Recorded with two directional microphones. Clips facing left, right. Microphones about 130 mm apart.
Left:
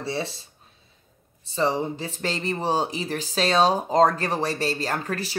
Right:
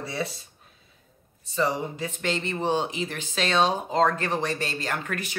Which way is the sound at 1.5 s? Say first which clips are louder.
Left 2 dB; 30° left (ahead or behind).